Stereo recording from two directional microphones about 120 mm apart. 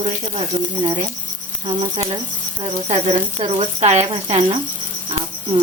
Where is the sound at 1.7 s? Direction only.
90° right.